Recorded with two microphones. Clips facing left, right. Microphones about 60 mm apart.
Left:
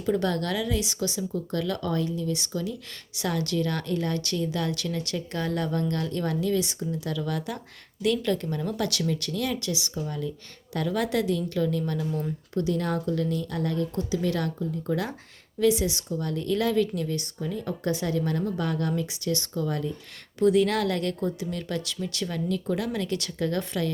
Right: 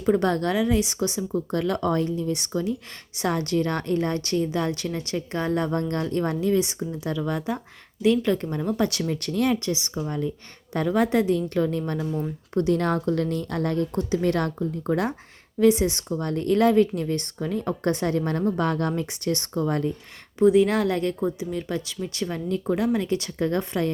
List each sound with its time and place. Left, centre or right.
0.0 s a woman's voice: right
12.5 s a woman's voice: right
20.4 s a woman's voice: right